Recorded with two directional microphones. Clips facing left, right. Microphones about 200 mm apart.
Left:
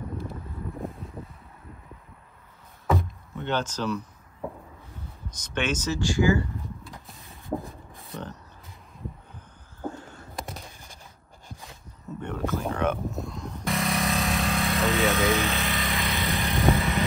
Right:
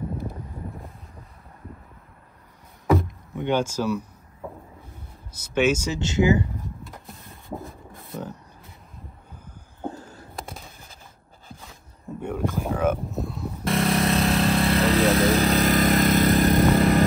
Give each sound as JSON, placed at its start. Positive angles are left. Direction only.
{"t": 3.3, "sound": "speech", "side_deg": -10}
{"t": 5.3, "sound": "speech", "side_deg": -10}
{"t": 5.9, "sound": "speech", "side_deg": -20}
{"t": 6.9, "sound": "vehicle", "side_deg": 0}
{"t": 7.6, "sound": "rub", "side_deg": 0}
{"t": 9.8, "sound": "a sound", "side_deg": -35}
{"t": 12.2, "sound": "vehicle", "side_deg": -10}
{"t": 14.2, "sound": "vehicle", "side_deg": -30}
{"t": 14.8, "sound": "vehicle", "side_deg": 0}
{"t": 15.3, "sound": "vehicle", "side_deg": -35}